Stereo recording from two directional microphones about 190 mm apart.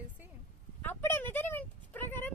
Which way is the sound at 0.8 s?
10° left (ahead or behind).